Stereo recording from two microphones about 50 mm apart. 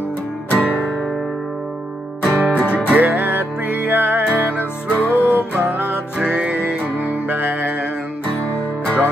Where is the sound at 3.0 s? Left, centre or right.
Right.